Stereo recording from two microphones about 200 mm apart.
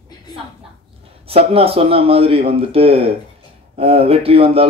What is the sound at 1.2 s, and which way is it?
A man's voice, 30° right (ahead or behind).